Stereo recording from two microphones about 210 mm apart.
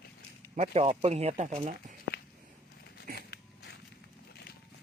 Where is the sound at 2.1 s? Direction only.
50° left (ahead or behind).